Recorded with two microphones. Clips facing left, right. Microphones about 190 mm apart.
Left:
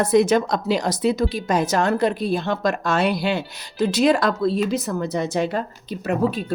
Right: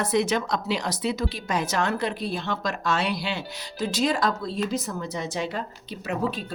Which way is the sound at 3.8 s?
70° left (ahead or behind).